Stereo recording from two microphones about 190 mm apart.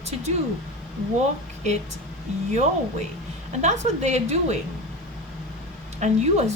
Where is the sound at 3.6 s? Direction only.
35° right (ahead or behind).